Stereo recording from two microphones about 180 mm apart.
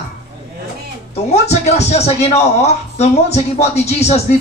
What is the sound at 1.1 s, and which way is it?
A man's voice, 35° left (ahead or behind).